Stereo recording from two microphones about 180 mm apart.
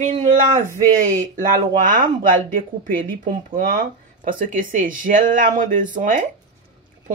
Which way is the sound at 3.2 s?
50° right (ahead or behind).